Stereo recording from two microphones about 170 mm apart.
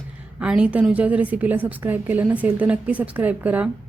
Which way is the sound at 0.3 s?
5° right (ahead or behind).